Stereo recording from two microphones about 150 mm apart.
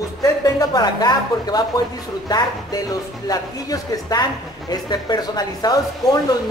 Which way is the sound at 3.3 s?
25° left (ahead or behind).